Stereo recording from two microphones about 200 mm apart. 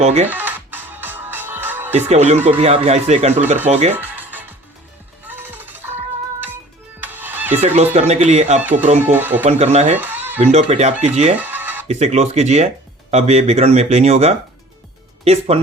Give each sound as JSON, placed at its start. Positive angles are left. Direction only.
{"t": 0.0, "sound": "speech", "side_deg": -35}
{"t": 0.3, "sound": "music", "side_deg": -10}
{"t": 2.0, "sound": "speech", "side_deg": -35}
{"t": 3.9, "sound": "music", "side_deg": -10}
{"t": 7.0, "sound": "music", "side_deg": -10}
{"t": 7.9, "sound": "speech", "side_deg": -35}
{"t": 9.0, "sound": "speech", "side_deg": -10}
{"t": 9.4, "sound": "speech", "side_deg": -35}
{"t": 10.0, "sound": "music", "side_deg": -10}
{"t": 10.4, "sound": "speech", "side_deg": -35}
{"t": 11.3, "sound": "music", "side_deg": -10}
{"t": 11.9, "sound": "speech", "side_deg": -35}